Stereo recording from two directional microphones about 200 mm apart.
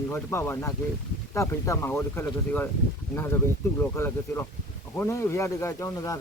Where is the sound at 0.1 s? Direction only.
10° left (ahead or behind).